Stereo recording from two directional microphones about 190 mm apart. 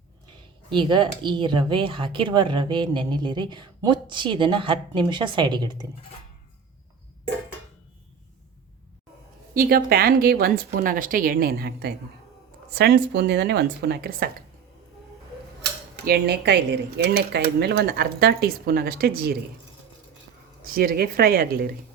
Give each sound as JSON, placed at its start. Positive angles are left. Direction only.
{"t": 0.7, "sound": "speech", "side_deg": -25}
{"t": 9.6, "sound": "a woman's voice", "side_deg": -50}
{"t": 16.0, "sound": "speech", "side_deg": -55}
{"t": 20.7, "sound": "a woman's voice", "side_deg": -50}